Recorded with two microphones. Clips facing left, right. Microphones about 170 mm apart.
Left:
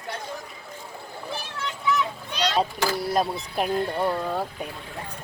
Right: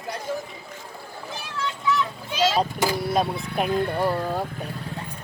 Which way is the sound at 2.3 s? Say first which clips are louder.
Right 4 dB; 5° right (ahead or behind).